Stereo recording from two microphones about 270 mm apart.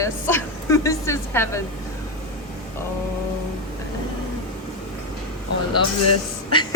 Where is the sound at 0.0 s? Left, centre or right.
Centre.